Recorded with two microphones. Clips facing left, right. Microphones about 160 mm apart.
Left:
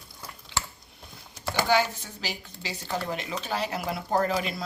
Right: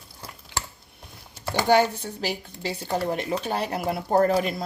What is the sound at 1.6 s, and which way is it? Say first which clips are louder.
Speech: right 6 dB; 60° right (ahead or behind).